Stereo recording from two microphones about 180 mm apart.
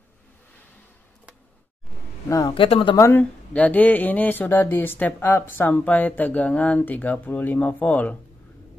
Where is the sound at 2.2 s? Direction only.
20° left (ahead or behind).